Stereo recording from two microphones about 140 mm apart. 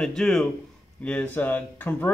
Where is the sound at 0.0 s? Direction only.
5° left (ahead or behind).